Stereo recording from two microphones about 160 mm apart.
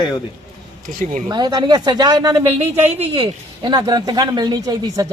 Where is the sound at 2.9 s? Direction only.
40° right (ahead or behind).